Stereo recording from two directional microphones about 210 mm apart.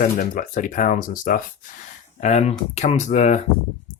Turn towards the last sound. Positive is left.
turn(degrees=35)  # may be behind; listen again after turning